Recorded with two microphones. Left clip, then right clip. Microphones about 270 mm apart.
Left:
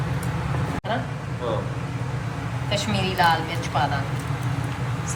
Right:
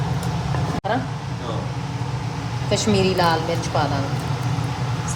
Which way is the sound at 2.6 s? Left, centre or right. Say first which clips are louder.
Right 6 dB; right.